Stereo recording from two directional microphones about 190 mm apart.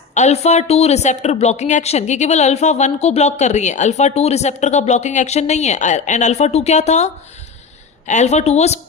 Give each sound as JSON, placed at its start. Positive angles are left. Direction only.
{"t": 0.1, "sound": "speech", "side_deg": 35}